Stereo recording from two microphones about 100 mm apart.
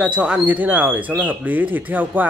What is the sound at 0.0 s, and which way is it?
Speech, 10° right (ahead or behind).